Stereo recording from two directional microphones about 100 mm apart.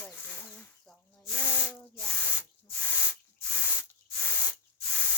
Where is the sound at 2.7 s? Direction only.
15° left (ahead or behind).